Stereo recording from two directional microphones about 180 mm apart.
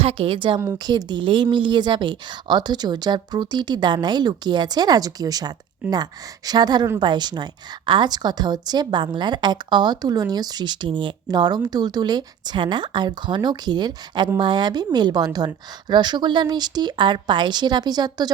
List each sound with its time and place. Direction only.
0.0 s a woman's voice: 30° right (ahead or behind)